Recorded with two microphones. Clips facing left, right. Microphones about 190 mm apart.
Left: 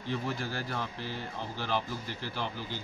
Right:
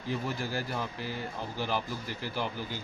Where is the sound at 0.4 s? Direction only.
5° right (ahead or behind).